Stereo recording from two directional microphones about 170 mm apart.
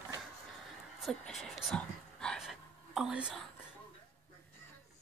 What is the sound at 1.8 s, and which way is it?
Whispering, 5° left (ahead or behind).